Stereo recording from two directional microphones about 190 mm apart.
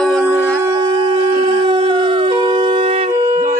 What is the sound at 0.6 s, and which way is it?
Howl, 20° right (ahead or behind).